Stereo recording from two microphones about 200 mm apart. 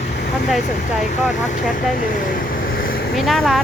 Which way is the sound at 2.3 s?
45° left (ahead or behind).